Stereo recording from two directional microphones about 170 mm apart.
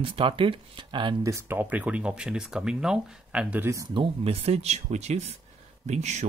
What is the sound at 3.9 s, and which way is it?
Speech, 30° right (ahead or behind).